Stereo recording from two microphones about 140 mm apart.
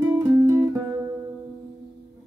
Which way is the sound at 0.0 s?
20° right (ahead or behind).